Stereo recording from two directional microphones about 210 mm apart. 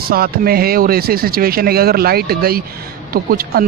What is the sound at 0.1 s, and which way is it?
Speech, 45° right (ahead or behind).